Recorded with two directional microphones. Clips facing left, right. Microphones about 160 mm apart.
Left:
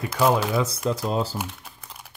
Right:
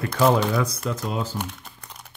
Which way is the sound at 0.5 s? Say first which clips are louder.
Left 1 dB; 25° left (ahead or behind).